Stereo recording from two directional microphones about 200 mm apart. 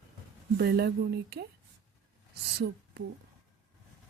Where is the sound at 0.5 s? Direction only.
60° right (ahead or behind).